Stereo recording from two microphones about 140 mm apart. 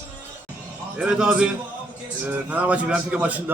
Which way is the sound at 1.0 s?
5° right (ahead or behind).